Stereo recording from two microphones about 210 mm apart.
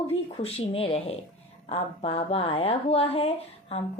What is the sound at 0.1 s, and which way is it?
A woman's voice, 30° left (ahead or behind).